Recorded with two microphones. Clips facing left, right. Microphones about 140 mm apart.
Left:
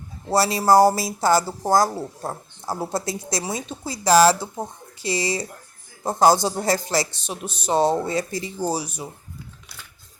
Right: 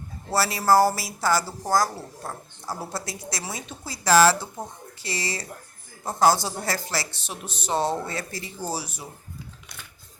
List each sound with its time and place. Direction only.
0.3 s a woman's voice: 20° left (ahead or behind)